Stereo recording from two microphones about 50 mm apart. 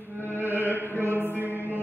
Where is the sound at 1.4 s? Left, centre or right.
Right.